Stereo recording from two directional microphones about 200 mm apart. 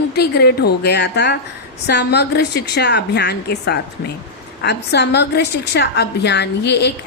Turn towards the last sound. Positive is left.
turn(degrees=60)  # may be behind; listen again after turning